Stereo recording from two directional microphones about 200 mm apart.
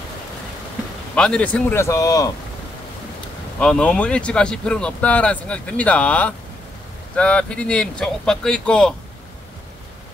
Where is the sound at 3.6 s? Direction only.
5° left (ahead or behind).